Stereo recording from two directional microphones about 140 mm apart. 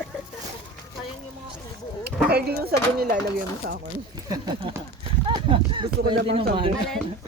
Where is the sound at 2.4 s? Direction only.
90° right.